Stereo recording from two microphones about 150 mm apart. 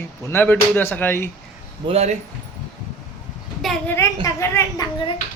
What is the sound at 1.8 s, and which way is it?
Speech, 45° right (ahead or behind).